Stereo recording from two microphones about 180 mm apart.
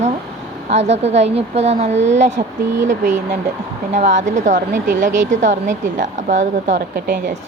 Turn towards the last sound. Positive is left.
turn(degrees=-45)  # may be behind; listen again after turning